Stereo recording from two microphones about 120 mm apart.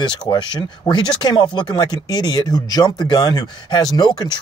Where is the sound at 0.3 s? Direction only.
40° left (ahead or behind).